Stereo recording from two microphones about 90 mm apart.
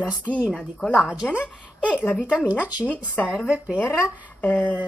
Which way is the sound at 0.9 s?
10° right (ahead or behind).